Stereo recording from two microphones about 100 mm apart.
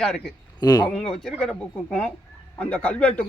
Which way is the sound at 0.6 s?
40° left (ahead or behind).